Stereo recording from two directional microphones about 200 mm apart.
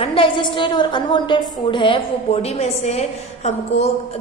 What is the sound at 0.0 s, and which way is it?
A woman's voice, 25° left (ahead or behind).